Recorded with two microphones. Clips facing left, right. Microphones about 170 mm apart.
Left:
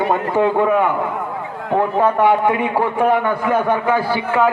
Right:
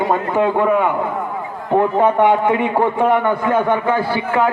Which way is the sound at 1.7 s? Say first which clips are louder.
Right 2 dB; 20° right (ahead or behind).